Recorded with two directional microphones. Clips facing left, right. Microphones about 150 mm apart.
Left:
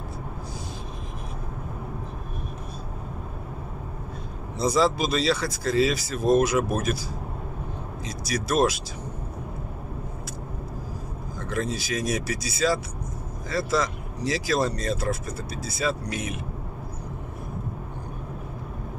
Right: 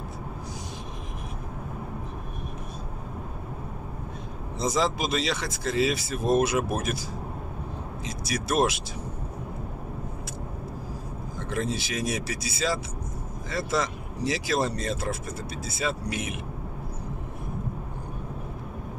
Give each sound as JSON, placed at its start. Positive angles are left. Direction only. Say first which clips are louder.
{"t": 4.6, "sound": "speech", "louder": "left 4 dB", "side_deg": -20}
{"t": 11.5, "sound": "speech", "louder": "left 1 dB", "side_deg": -25}